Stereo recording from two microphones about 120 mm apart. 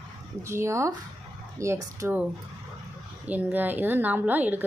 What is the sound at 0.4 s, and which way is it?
Speech, 25° right (ahead or behind).